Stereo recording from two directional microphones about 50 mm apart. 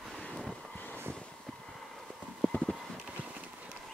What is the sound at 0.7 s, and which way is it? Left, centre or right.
Vehicle, left.